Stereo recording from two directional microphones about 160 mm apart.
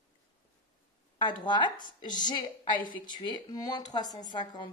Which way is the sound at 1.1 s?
30° left (ahead or behind).